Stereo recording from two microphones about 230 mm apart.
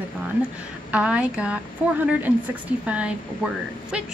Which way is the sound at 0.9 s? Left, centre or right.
Centre.